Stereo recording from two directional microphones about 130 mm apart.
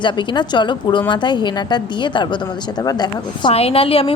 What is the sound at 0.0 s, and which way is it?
A woman's voice, 35° left (ahead or behind).